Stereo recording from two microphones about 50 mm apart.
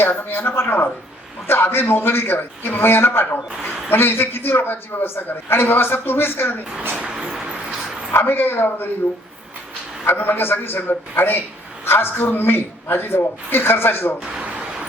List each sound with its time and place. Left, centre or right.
0.0 s a man's voice: left
7.2 s bow-wow: centre
8.1 s a man's voice: left
10.2 s a man's voice: left
14.3 s a sound: right